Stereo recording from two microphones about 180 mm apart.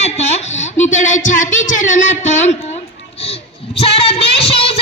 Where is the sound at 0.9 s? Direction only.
45° left (ahead or behind).